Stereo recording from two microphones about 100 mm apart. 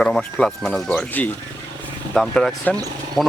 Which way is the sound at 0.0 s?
10° left (ahead or behind).